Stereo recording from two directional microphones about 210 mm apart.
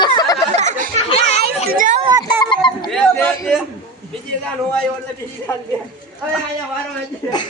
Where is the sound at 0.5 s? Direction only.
35° right (ahead or behind).